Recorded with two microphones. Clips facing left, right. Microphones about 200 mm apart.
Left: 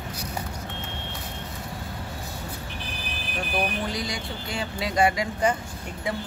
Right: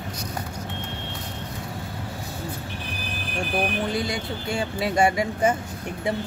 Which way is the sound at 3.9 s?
25° right (ahead or behind).